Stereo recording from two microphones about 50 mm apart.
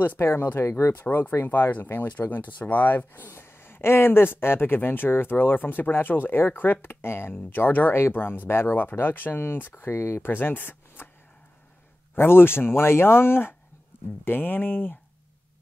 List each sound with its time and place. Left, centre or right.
0.2 s speech: left
1.4 s speech: left
9.8 s speech: left
10.3 s speech: left
12.2 s speech: left